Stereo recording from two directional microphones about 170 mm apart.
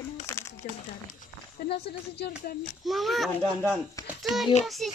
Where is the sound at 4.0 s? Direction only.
20° left (ahead or behind).